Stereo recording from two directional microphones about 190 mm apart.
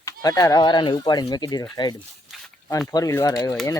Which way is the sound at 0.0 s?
20° left (ahead or behind).